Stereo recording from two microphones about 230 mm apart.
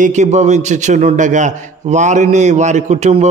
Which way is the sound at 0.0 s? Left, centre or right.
Right.